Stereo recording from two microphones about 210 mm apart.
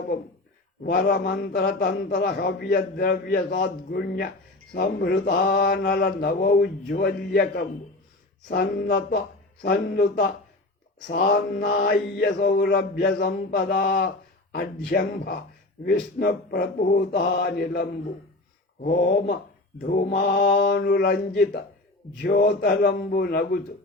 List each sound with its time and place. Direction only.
0.9 s mantra: 45° left (ahead or behind)
19.8 s mantra: 50° left (ahead or behind)